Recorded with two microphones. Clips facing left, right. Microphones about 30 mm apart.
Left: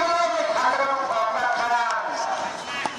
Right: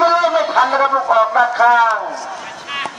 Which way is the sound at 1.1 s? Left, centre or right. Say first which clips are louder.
Right 10 dB; right.